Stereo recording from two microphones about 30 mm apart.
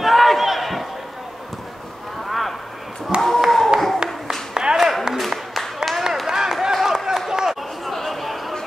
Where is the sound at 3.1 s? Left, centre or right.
Right.